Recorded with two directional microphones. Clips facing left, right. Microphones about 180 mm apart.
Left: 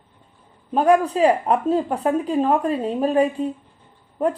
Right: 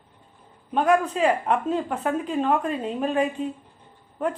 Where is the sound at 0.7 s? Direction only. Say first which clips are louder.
Left 4 dB; 35° left (ahead or behind).